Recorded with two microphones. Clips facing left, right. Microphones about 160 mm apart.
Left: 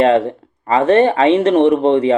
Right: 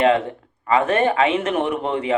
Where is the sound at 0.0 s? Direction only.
30° left (ahead or behind).